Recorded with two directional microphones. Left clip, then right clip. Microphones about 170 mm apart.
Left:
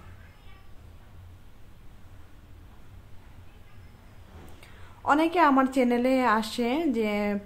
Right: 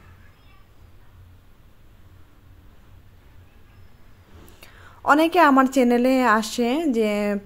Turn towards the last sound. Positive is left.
turn(degrees=-35)  # may be behind; listen again after turning